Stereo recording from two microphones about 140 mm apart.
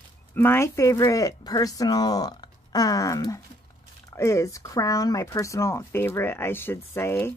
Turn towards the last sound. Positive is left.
turn(degrees=15)  # may be behind; listen again after turning